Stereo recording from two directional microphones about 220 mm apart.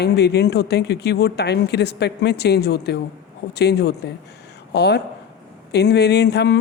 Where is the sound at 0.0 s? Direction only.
50° left (ahead or behind).